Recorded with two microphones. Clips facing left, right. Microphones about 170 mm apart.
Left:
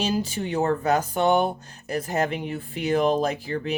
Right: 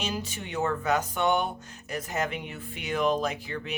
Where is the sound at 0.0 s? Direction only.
30° left (ahead or behind).